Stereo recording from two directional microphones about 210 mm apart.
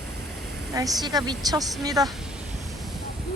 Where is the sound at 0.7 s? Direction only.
15° right (ahead or behind).